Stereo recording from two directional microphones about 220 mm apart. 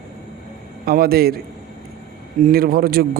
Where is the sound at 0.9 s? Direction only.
45° right (ahead or behind).